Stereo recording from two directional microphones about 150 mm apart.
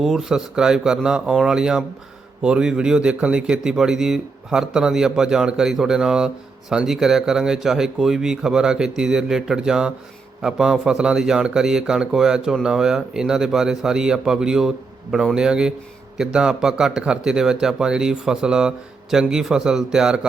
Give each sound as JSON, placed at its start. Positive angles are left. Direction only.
{"t": 0.0, "sound": "speech", "side_deg": -5}